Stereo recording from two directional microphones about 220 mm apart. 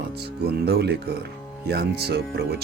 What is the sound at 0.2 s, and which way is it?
Speech, 45° right (ahead or behind).